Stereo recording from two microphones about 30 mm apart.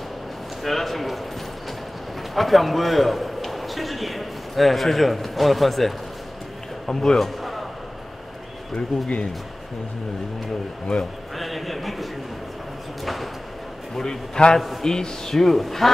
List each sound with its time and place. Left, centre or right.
0.7 s speech: centre
2.3 s a man's voice: centre
6.9 s a man's voice: centre
10.9 s a man's voice: centre
14.0 s a man's voice: left; by 15.9 s centre